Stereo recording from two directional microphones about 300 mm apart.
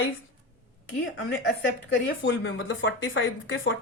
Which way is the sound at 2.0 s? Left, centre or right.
Left.